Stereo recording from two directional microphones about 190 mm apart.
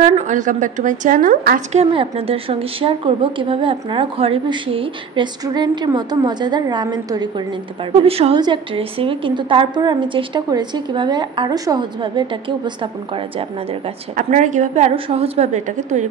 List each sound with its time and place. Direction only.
0.0 s a woman's voice: 35° right (ahead or behind)
1.8 s a woman's voice: 30° right (ahead or behind)
14.1 s a woman's voice: 40° right (ahead or behind)